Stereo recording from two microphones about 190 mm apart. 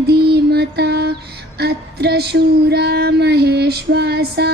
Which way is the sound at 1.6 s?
60° right (ahead or behind).